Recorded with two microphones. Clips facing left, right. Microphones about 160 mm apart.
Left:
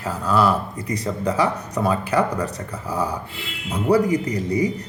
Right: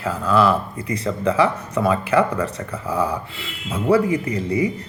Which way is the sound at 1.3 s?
40° left (ahead or behind).